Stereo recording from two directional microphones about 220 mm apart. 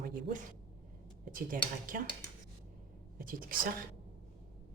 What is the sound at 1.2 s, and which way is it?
Speech, 40° right (ahead or behind).